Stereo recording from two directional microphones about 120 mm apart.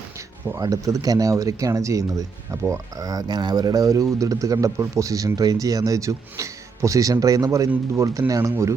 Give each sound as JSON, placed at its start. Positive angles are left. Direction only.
{"t": 0.5, "sound": "speech", "side_deg": -30}